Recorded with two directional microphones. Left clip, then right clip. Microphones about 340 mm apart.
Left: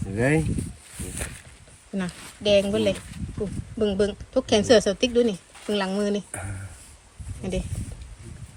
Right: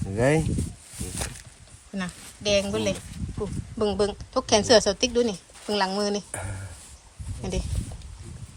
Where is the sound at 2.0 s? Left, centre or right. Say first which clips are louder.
Left 2 dB; centre.